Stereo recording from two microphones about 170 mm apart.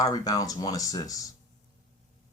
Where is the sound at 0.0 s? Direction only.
20° left (ahead or behind).